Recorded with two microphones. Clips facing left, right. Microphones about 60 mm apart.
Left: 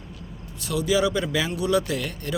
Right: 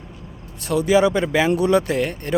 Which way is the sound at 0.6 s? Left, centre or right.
Right.